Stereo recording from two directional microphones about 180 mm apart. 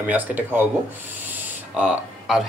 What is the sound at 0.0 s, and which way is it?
Speech, 10° right (ahead or behind).